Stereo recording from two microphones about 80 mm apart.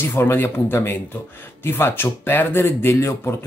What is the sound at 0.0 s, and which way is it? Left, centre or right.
Speech, left.